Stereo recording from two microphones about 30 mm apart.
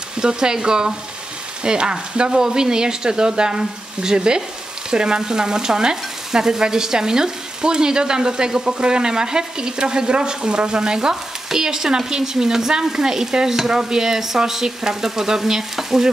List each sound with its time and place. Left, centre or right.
0.2 s stir: right
2.3 s stir: right
13.7 s frying: centre